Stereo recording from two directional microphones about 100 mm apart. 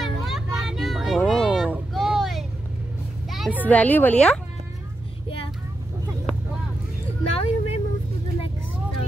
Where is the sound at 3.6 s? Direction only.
15° left (ahead or behind).